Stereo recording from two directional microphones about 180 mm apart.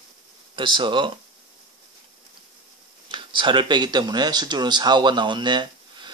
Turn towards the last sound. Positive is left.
turn(degrees=-25)  # may be behind; listen again after turning